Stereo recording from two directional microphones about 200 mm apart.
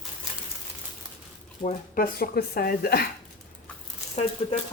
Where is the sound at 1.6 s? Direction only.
40° left (ahead or behind).